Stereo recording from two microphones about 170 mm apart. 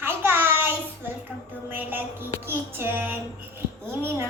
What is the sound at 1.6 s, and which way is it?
Child singing, 10° right (ahead or behind).